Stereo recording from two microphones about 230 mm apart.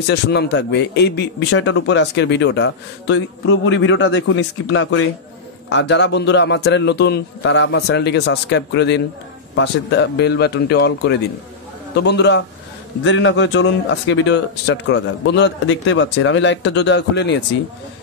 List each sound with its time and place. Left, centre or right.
0.1 s a man's voice: left